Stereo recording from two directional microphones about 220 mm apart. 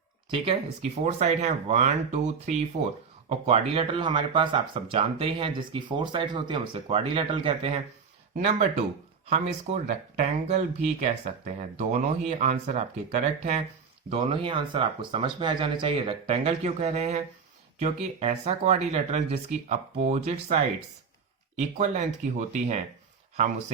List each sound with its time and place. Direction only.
0.3 s speech: 25° right (ahead or behind)
9.3 s speech: 30° right (ahead or behind)